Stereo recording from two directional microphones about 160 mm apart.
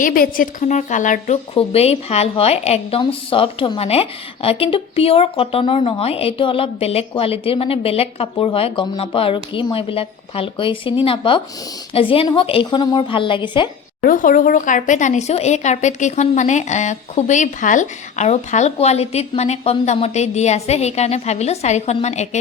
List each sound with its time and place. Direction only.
0.0 s speech: 60° left (ahead or behind)
1.5 s speech: 40° left (ahead or behind)
14.0 s speech: 60° left (ahead or behind)